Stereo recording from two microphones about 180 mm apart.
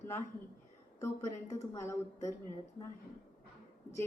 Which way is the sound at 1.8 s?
15° left (ahead or behind).